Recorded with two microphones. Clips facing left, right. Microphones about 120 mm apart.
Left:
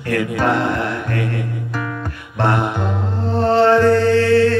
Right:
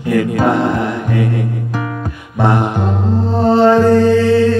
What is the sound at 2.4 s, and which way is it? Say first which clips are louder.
Music: right 3 dB; 15° right (ahead or behind).